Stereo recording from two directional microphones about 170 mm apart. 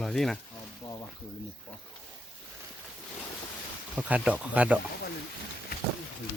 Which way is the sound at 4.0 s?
10° right (ahead or behind).